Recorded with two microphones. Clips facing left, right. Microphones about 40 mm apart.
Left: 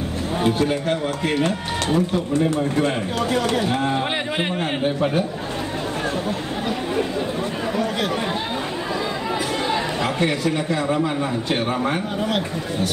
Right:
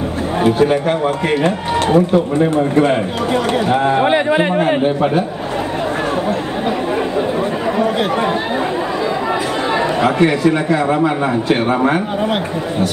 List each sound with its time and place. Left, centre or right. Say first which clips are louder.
0.7 s a man's voice: right 7 dB; right
3.9 s a man's voice: right 10 dB; right
11.4 s a man's voice: right 9 dB; right